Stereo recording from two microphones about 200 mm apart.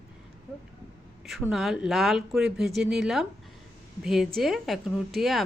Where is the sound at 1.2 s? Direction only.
Centre (ahead or behind).